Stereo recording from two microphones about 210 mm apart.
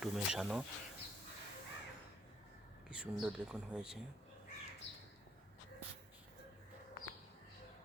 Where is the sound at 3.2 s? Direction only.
5° right (ahead or behind).